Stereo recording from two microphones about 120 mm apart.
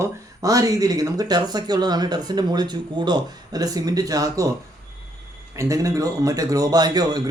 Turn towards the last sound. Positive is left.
turn(degrees=-35)  # may be behind; listen again after turning